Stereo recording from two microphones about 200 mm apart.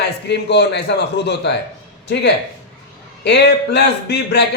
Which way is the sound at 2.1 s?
60° left (ahead or behind).